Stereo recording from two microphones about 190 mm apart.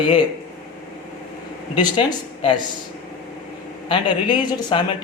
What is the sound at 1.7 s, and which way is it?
Speech, 25° left (ahead or behind).